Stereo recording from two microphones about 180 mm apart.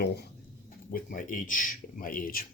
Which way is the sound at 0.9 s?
50° left (ahead or behind).